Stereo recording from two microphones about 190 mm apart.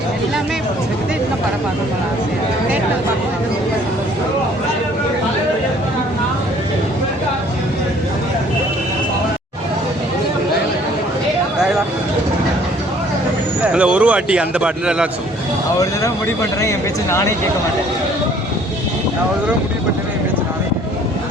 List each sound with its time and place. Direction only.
13.7 s a man's voice: 5° right (ahead or behind)
15.8 s speech: 15° left (ahead or behind)